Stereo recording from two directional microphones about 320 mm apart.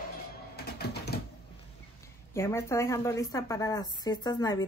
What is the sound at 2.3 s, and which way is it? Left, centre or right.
Speech, centre.